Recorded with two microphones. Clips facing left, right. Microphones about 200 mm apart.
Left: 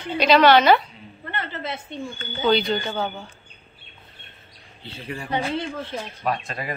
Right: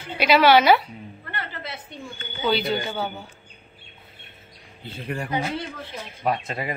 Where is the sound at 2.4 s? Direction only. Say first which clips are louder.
Left 3 dB; 5° right (ahead or behind).